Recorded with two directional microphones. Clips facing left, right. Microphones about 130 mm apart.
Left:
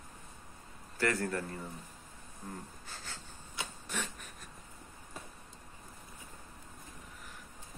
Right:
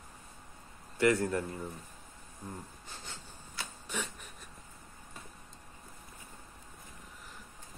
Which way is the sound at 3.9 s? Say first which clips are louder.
Right 1 dB; 10° right (ahead or behind).